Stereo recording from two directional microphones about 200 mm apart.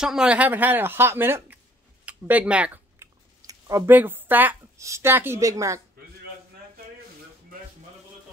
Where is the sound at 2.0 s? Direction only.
10° right (ahead or behind).